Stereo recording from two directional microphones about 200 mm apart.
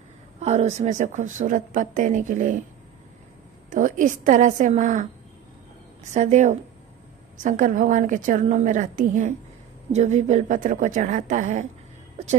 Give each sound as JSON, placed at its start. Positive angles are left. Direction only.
{"t": 0.4, "sound": "speech", "side_deg": -35}
{"t": 3.7, "sound": "speech", "side_deg": -40}
{"t": 6.1, "sound": "speech", "side_deg": -35}